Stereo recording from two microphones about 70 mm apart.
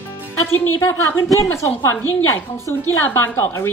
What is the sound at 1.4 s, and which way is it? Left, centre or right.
A woman's voice, left.